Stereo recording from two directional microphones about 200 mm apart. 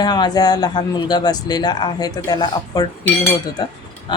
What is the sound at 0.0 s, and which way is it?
Speech, 20° left (ahead or behind).